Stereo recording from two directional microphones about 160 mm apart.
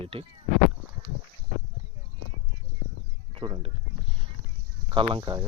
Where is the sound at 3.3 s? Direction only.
30° right (ahead or behind).